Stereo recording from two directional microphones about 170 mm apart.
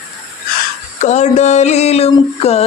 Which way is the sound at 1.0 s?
40° left (ahead or behind).